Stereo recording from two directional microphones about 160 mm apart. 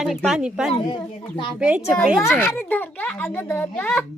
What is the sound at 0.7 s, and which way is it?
Speech, 30° left (ahead or behind).